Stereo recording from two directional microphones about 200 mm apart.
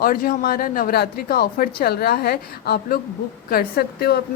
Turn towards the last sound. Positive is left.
turn(degrees=50)  # may be behind; listen again after turning